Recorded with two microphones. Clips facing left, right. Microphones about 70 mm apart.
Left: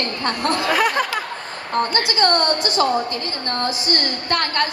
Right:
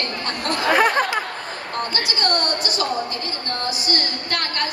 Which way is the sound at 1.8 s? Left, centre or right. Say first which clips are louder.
Left 6 dB; left.